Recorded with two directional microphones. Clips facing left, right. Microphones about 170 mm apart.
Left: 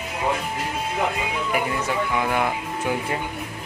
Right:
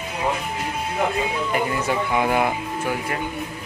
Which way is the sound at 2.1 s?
25° right (ahead or behind).